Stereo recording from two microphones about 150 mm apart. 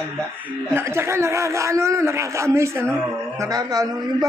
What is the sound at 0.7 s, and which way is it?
Speech, 15° right (ahead or behind).